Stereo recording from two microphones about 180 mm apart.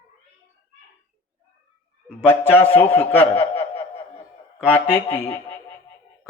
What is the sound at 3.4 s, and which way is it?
Snicker, 35° left (ahead or behind).